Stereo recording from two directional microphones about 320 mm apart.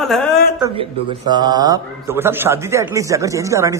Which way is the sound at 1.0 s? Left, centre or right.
Centre.